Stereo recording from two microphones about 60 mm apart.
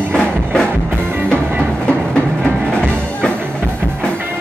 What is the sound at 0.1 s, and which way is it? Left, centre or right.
Music, centre.